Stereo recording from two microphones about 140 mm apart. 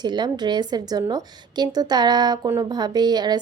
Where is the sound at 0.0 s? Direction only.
30° right (ahead or behind).